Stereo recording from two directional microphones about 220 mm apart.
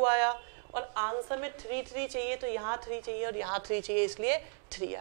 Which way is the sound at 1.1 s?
15° right (ahead or behind).